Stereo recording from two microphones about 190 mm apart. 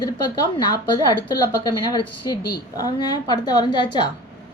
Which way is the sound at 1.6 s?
20° left (ahead or behind).